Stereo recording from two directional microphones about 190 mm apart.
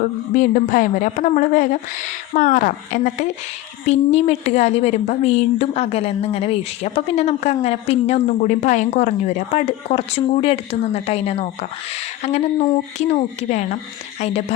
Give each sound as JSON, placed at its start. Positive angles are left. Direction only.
{"t": 0.0, "sound": "a woman's voice", "side_deg": 45}